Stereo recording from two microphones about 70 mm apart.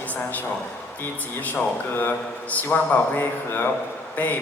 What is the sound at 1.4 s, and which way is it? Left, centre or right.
A man's voice, left.